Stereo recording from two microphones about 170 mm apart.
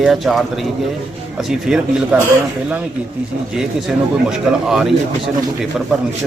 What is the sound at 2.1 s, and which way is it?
Speech, 5° right (ahead or behind).